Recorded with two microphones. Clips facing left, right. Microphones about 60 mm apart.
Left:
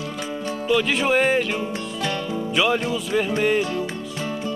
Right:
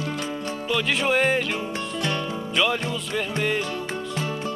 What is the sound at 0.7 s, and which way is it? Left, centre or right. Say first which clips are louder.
Music: left 3 dB; centre.